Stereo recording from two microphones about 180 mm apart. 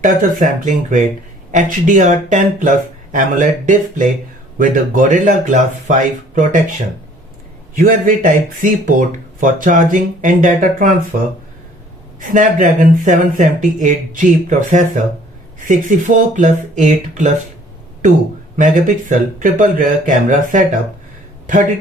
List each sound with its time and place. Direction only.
0.0 s speech: 45° right (ahead or behind)
7.8 s speech: 50° right (ahead or behind)
12.3 s speech: 45° right (ahead or behind)
18.5 s speech: 45° right (ahead or behind)